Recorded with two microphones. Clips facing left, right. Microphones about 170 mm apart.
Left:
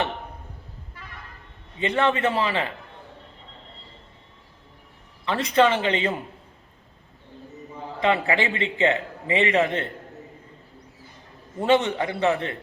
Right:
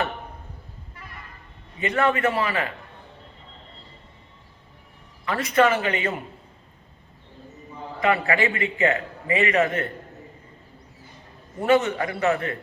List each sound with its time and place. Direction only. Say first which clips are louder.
2.0 s a man's voice: even; 25° left (ahead or behind)
5.2 s a man's voice: even; 25° left (ahead or behind)
8.0 s a man's voice: even; 25° left (ahead or behind)
11.6 s a man's voice: even; 20° left (ahead or behind)